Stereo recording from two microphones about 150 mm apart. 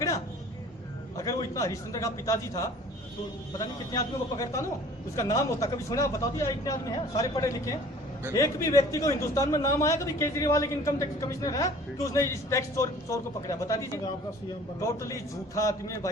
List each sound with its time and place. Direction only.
1.1 s a man's voice: 25° left (ahead or behind)
3.9 s a man's voice: 25° left (ahead or behind)